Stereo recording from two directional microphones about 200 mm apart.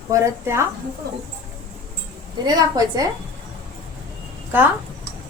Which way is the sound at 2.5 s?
20° right (ahead or behind).